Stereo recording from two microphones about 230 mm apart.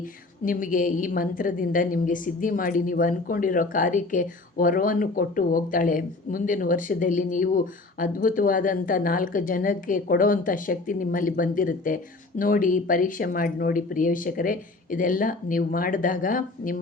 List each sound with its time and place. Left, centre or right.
0.4 s a woman's voice: left